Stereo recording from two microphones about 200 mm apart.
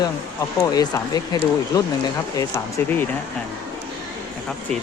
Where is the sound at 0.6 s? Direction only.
20° left (ahead or behind).